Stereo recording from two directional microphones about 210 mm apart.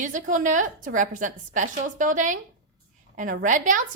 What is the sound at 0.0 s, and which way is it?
Speech, 35° right (ahead or behind).